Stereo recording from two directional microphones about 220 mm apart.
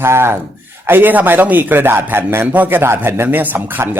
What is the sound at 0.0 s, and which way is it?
Speech, 10° right (ahead or behind).